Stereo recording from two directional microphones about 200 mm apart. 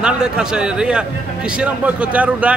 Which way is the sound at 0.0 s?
5° right (ahead or behind).